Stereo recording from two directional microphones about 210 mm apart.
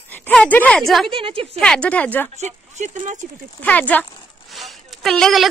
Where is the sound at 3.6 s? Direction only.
5° left (ahead or behind).